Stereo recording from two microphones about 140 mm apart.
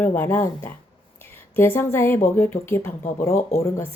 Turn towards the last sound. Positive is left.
turn(degrees=20)  # may be behind; listen again after turning